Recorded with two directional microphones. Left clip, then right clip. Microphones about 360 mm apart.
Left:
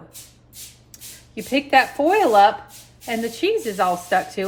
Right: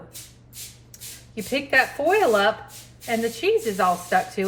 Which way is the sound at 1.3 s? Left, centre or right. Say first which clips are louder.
Left 4 dB; centre.